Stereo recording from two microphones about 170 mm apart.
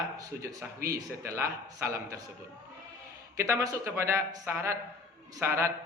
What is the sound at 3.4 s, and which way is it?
A man's voice, 15° right (ahead or behind).